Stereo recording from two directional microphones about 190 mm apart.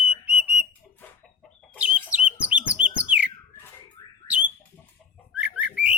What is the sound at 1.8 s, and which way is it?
Chicken, 5° right (ahead or behind).